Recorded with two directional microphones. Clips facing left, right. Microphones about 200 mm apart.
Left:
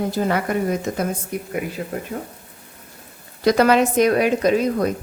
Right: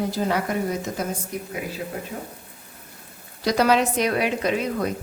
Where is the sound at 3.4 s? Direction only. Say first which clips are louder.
Left 4 dB; 55° left (ahead or behind).